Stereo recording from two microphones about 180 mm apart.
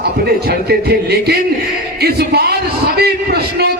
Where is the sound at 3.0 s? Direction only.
60° right (ahead or behind).